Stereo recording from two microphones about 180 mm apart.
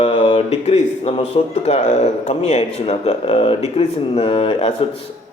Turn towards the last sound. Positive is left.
turn(degrees=35)  # may be behind; listen again after turning